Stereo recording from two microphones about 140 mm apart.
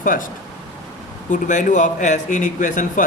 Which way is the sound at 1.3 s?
65° left (ahead or behind).